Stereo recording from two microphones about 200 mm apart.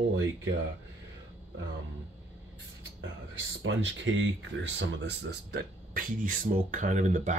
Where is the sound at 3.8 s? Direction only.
70° right (ahead or behind).